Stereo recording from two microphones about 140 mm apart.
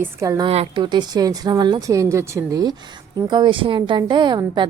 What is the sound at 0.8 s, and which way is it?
A woman's voice, 30° right (ahead or behind).